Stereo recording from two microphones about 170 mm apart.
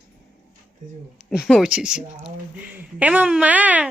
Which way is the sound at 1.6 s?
5° right (ahead or behind).